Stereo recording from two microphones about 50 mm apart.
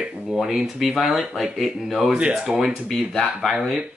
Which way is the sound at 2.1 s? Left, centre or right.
Right.